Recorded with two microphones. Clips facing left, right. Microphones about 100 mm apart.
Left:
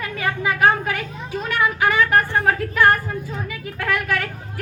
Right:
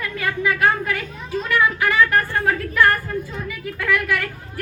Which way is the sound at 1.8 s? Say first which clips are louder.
Even; 20° left (ahead or behind).